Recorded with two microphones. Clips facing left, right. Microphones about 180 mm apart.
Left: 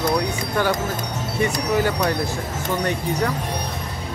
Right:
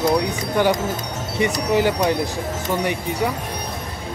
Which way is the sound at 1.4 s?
15° right (ahead or behind).